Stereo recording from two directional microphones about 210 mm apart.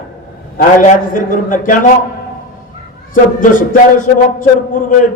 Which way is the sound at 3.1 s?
40° left (ahead or behind).